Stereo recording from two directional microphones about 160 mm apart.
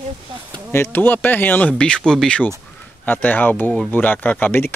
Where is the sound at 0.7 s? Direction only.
15° left (ahead or behind).